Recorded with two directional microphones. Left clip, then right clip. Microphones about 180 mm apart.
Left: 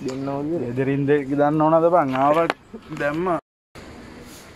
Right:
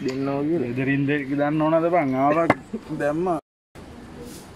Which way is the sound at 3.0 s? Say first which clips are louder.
Left 1 dB; 15° left (ahead or behind).